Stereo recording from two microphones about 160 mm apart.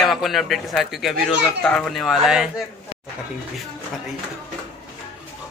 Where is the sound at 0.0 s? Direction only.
Centre (ahead or behind).